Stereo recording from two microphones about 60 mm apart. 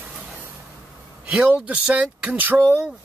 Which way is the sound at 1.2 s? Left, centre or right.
Right.